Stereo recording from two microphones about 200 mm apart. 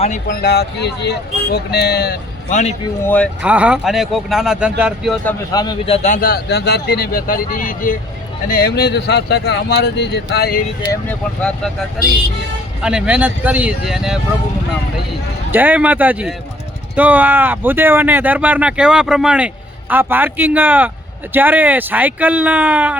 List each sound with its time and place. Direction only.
0.3 s speech: 55° left (ahead or behind)
2.5 s a man's voice: 35° left (ahead or behind)
3.0 s speech: 10° left (ahead or behind)
3.4 s speech: 5° right (ahead or behind)
5.2 s a man's voice: 20° left (ahead or behind)
6.1 s speech: 50° left (ahead or behind)
11.1 s speech: 5° left (ahead or behind)
12.8 s speech: 5° right (ahead or behind)
15.5 s speech: 10° right (ahead or behind)